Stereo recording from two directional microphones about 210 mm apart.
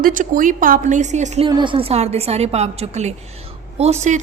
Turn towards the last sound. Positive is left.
turn(degrees=-30)  # may be behind; listen again after turning